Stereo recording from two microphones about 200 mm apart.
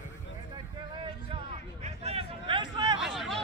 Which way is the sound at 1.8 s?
30° right (ahead or behind).